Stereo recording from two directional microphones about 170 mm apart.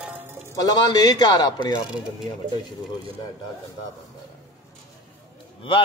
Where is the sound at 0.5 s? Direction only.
20° left (ahead or behind).